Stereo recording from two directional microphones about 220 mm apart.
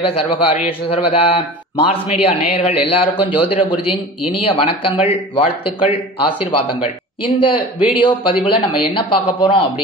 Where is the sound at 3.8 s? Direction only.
90° left.